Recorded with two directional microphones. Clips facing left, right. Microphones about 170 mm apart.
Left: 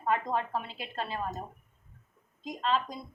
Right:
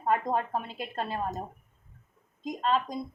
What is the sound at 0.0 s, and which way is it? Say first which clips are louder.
Speech: right 2 dB; 45° right (ahead or behind).